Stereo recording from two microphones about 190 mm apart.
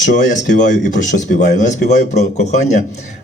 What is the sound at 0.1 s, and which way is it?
A man's voice, 45° left (ahead or behind).